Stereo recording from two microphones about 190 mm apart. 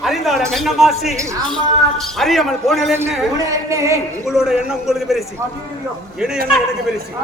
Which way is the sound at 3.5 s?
15° right (ahead or behind).